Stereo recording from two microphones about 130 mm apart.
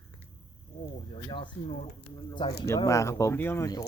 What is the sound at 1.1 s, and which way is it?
Speech, 40° left (ahead or behind).